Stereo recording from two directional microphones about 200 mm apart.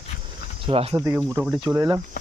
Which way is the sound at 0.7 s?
30° right (ahead or behind).